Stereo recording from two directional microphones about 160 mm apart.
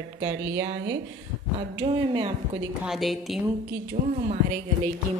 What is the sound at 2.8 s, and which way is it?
Speech, centre (ahead or behind).